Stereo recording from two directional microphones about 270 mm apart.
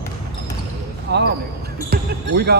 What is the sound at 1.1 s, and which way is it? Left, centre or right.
Speech, right.